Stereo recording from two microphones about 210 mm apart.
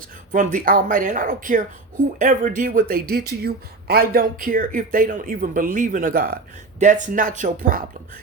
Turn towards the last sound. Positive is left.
turn(degrees=-40)  # may be behind; listen again after turning